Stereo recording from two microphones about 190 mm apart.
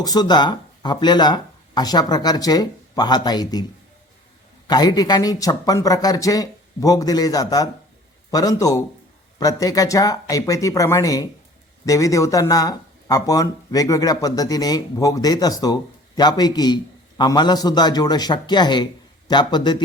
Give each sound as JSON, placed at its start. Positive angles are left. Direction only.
{"t": 0.0, "sound": "speech", "side_deg": 20}
{"t": 4.7, "sound": "speech", "side_deg": 20}